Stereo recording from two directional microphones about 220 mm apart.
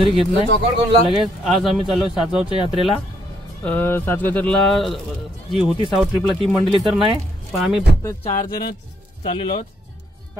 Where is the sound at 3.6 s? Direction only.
10° left (ahead or behind).